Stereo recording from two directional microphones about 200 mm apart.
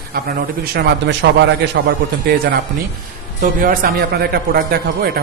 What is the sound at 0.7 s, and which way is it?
Speech, 60° right (ahead or behind).